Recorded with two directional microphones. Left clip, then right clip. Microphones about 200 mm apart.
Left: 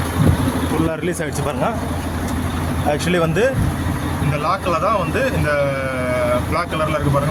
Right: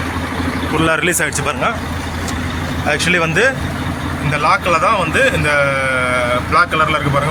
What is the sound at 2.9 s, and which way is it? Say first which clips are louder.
Speech: right 5 dB; 15° left (ahead or behind).